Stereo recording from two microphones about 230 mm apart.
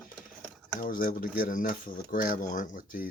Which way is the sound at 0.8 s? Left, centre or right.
Left.